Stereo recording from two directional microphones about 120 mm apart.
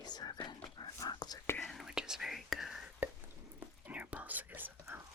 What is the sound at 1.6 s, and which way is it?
Whispering, centre (ahead or behind).